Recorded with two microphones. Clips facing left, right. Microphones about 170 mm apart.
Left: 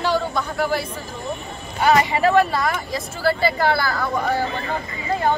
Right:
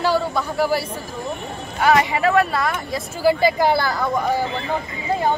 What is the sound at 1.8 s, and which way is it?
Speech, centre (ahead or behind).